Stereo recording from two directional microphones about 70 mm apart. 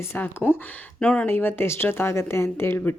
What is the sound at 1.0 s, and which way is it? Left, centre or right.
Speech, centre.